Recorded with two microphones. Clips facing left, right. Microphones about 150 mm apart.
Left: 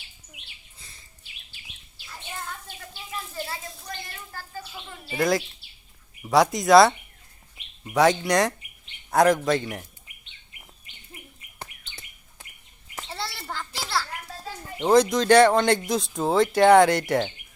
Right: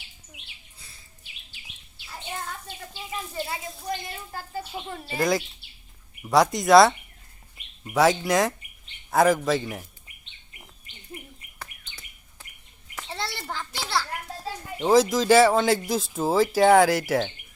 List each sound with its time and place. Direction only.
0.8 s bird: centre (ahead or behind)
2.6 s a sound: 20° right (ahead or behind)
4.3 s bird: 20° right (ahead or behind)
5.1 s speech: centre (ahead or behind)
13.1 s children playing: 5° left (ahead or behind)
14.8 s speech: 5° right (ahead or behind)